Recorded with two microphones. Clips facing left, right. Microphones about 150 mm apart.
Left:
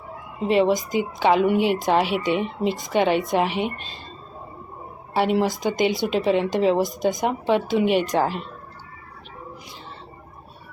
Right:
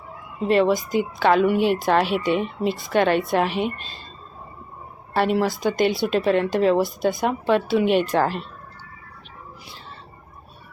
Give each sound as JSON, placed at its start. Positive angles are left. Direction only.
{"t": 0.3, "sound": "a woman's voice", "side_deg": 15}
{"t": 5.1, "sound": "a woman's voice", "side_deg": 15}